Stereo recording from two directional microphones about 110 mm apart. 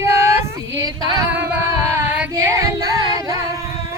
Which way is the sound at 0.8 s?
35° right (ahead or behind).